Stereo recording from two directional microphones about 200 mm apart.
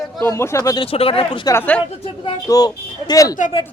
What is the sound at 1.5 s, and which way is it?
Speech, 5° left (ahead or behind).